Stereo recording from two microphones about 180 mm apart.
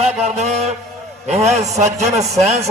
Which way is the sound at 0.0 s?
35° right (ahead or behind).